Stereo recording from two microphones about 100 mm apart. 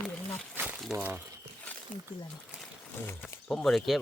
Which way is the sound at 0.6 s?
20° right (ahead or behind).